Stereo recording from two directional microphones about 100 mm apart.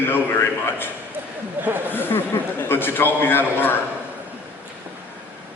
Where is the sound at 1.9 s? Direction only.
20° left (ahead or behind).